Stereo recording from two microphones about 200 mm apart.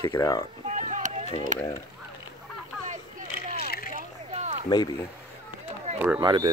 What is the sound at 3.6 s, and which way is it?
Vehicle, 50° left (ahead or behind).